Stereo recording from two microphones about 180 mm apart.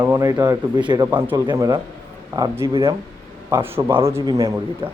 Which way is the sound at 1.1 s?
10° right (ahead or behind).